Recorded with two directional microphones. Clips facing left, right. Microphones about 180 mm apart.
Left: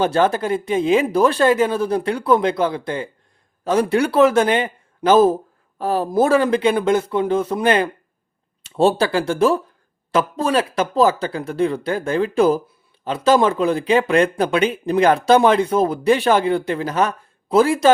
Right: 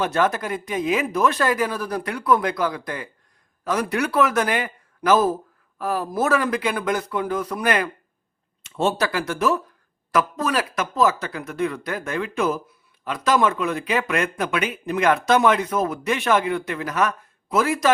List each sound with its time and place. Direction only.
0.0 s speech: 30° left (ahead or behind)